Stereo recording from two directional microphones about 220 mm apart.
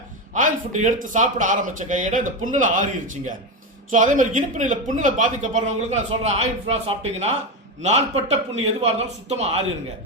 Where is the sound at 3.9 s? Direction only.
35° right (ahead or behind).